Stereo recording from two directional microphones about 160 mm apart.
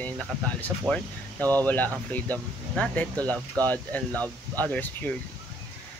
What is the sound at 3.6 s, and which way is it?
Speech, 10° left (ahead or behind).